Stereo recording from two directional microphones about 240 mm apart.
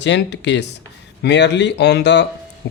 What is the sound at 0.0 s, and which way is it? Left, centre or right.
Speech, left.